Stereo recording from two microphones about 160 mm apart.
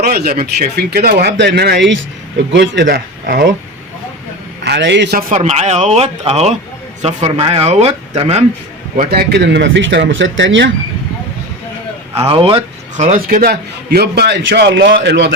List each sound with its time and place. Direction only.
0.0 s a man's voice: 70° right (ahead or behind)
4.6 s a man's voice: 90° right
5.3 s speech: 45° right (ahead or behind)
9.0 s a man's voice: 75° right (ahead or behind)
12.1 s speech: 35° right (ahead or behind)
13.1 s a man's voice: 70° right (ahead or behind); by 15.3 s 90° right